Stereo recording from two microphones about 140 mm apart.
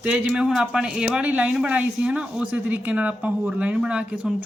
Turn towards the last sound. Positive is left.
turn(degrees=-5)  # may be behind; listen again after turning